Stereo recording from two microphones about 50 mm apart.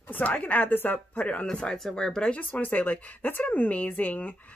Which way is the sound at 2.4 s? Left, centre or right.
Left.